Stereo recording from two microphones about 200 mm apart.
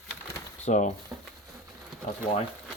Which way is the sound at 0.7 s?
35° left (ahead or behind).